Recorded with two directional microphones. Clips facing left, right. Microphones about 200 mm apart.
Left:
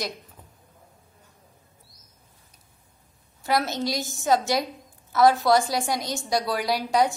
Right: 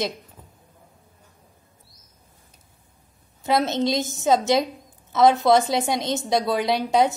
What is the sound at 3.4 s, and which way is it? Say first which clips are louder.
A woman's voice: right 4 dB; 20° right (ahead or behind).